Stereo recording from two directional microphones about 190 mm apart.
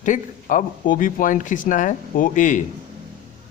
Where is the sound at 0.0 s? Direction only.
45° left (ahead or behind).